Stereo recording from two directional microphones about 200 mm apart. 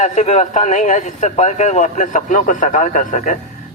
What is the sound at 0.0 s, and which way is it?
A man's voice, 35° left (ahead or behind).